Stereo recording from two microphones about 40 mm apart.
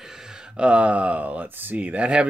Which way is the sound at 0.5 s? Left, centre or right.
Right.